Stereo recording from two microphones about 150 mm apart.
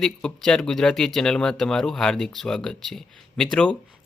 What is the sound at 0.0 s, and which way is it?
A man's voice, 5° left (ahead or behind).